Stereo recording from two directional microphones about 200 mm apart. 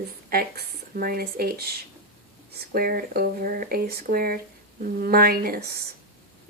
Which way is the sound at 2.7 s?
45° right (ahead or behind).